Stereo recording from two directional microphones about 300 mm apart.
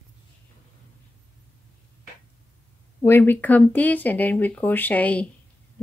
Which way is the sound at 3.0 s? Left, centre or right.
Centre.